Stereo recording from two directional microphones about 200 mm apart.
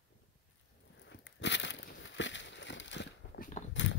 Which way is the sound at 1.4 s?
65° left (ahead or behind).